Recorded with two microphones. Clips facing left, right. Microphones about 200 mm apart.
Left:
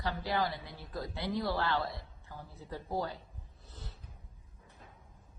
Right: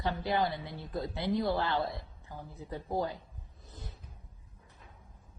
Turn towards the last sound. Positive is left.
turn(degrees=-15)  # may be behind; listen again after turning